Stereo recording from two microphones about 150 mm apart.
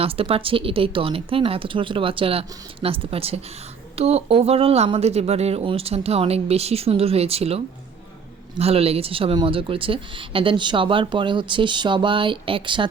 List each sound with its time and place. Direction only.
0.0 s speech: 40° right (ahead or behind)